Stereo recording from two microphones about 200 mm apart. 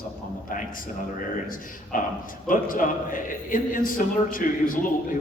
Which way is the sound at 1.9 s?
45° left (ahead or behind).